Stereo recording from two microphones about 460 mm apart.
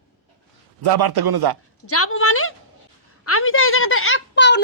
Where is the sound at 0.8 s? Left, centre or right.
Right.